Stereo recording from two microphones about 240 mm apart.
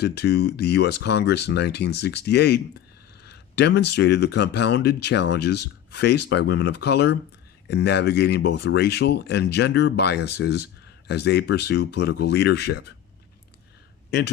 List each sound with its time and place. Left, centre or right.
0.0 s speech: left